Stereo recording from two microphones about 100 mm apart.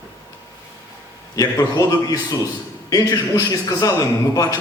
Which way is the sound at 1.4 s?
35° left (ahead or behind).